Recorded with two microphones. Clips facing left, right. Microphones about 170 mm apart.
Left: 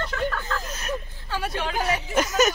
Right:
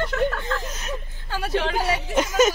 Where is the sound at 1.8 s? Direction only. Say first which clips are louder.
Right 1 dB; 25° right (ahead or behind).